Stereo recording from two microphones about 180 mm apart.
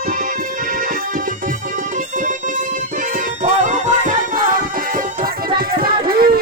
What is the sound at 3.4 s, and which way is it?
Music, 45° right (ahead or behind).